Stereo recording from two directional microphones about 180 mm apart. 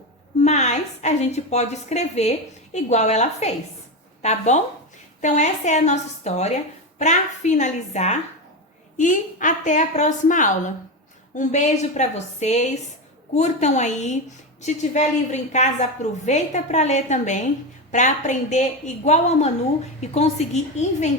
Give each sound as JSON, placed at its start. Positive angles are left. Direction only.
{"t": 0.4, "sound": "a woman's voice", "side_deg": 40}